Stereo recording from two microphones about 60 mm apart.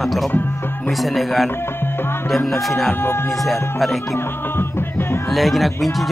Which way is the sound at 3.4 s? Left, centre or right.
Centre.